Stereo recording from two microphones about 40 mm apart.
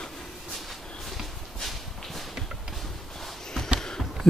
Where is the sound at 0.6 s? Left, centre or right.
Centre.